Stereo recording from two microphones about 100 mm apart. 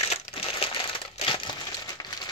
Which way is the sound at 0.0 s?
80° left.